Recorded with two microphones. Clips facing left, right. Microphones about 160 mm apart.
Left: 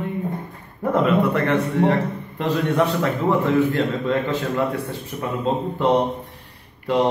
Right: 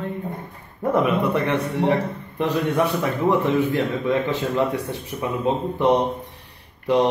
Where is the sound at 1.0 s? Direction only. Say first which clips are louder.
Left 2 dB; 15° right (ahead or behind).